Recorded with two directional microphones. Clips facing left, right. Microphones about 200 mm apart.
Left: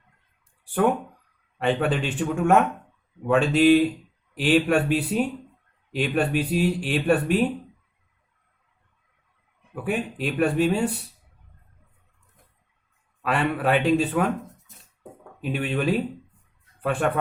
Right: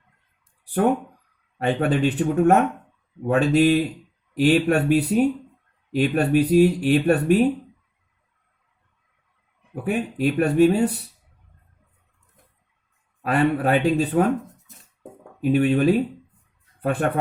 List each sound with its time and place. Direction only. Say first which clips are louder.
1.5 s speech: right 2 dB; 40° right (ahead or behind)
9.7 s speech: right 3 dB; 40° right (ahead or behind)
13.2 s speech: right 3 dB; 40° right (ahead or behind)
15.4 s speech: right 8 dB; 40° right (ahead or behind)